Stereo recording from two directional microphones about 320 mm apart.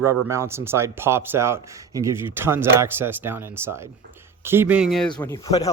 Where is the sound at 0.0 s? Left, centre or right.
Centre.